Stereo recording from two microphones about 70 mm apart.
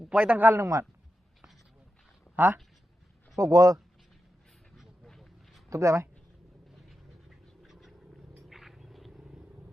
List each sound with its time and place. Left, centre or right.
0.0 s a sound: centre
0.3 s a man's voice: right
0.5 s speech: right
2.3 s a woman's voice: right
3.3 s speech: right
5.0 s a sound: centre
5.7 s speech: right
6.7 s cat: centre
8.4 s purr: centre
9.2 s vehicle: centre